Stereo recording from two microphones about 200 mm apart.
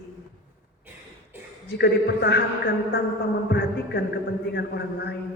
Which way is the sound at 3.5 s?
50° left (ahead or behind).